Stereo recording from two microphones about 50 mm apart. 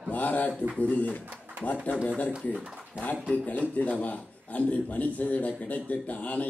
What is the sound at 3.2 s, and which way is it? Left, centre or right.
Speech, right.